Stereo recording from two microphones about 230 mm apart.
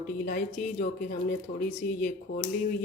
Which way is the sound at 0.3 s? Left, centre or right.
Left.